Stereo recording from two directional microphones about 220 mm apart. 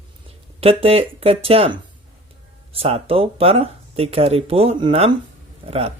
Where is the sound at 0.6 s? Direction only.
25° right (ahead or behind).